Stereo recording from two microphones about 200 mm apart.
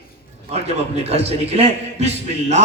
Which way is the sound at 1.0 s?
30° right (ahead or behind).